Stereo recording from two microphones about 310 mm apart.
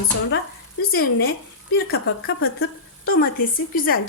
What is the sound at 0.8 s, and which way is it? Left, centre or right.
A woman's voice, left.